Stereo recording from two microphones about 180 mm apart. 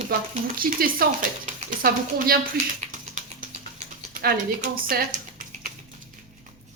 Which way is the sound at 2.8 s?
45° right (ahead or behind).